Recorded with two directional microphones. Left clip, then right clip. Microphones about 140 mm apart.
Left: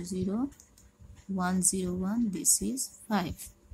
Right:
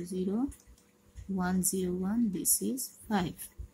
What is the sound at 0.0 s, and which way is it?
Speech, 15° left (ahead or behind).